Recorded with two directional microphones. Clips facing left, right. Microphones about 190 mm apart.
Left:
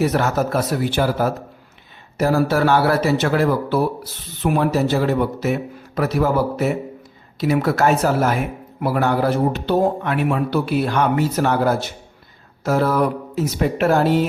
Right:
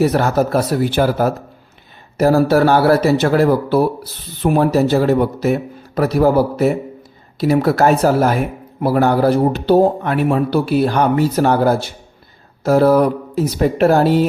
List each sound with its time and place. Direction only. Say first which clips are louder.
0.0 s speech: right 4 dB; 35° right (ahead or behind)